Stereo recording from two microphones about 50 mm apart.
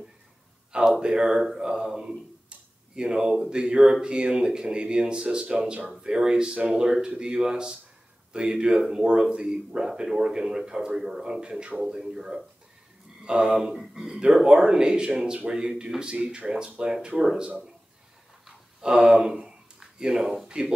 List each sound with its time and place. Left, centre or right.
0.7 s speech: centre
18.8 s speech: centre
19.2 s a sound: centre